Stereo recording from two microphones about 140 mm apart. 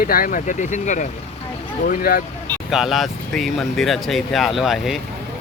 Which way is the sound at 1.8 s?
90° left.